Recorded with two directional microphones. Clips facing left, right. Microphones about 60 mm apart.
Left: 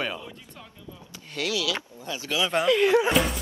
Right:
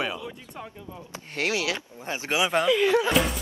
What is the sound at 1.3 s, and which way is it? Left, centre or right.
Speech, right.